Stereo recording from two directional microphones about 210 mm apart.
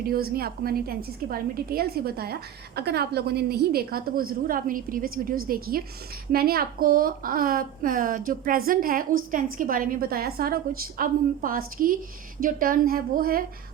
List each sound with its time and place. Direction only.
0.1 s a woman's voice: 45° right (ahead or behind)